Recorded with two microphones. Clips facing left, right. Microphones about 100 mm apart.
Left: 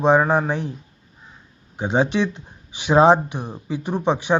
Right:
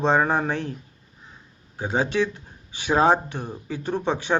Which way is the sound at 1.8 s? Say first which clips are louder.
Left 3 dB; 20° left (ahead or behind).